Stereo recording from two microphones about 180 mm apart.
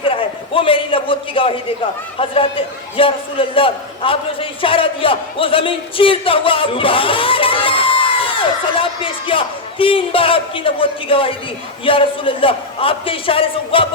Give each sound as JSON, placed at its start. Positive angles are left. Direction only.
{"t": 0.0, "sound": "a man's voice", "side_deg": 30}